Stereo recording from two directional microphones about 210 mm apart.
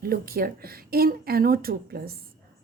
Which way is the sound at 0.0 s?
45° right (ahead or behind).